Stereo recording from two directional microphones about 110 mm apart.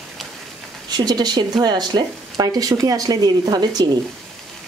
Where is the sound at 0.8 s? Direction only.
40° right (ahead or behind).